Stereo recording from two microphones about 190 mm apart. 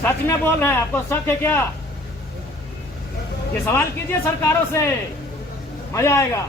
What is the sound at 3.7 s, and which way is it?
Speech, 15° left (ahead or behind).